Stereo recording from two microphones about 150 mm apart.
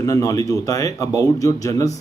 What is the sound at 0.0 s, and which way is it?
A man's voice, 20° left (ahead or behind).